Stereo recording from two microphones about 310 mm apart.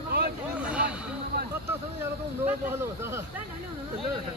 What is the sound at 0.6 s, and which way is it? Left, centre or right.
Speech, centre.